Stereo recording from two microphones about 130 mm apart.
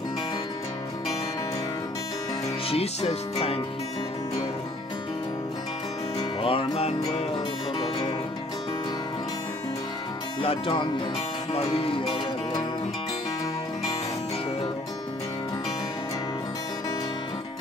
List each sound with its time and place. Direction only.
2.7 s speech: 55° left (ahead or behind)
6.4 s music: 50° left (ahead or behind)
10.4 s speech: 40° left (ahead or behind)